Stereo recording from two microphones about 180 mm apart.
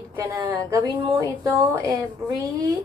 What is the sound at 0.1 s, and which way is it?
A woman's voice, 20° right (ahead or behind).